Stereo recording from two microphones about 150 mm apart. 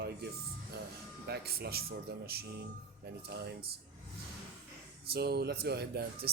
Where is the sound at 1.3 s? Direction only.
90° right.